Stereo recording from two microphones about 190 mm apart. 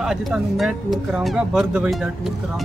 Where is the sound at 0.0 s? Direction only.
Centre (ahead or behind).